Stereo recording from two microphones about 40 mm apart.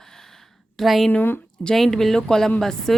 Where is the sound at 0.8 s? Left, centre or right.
Centre.